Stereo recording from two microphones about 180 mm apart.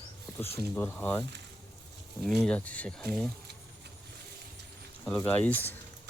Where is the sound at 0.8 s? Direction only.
10° left (ahead or behind).